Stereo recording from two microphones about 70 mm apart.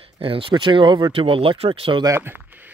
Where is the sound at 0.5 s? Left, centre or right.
Right.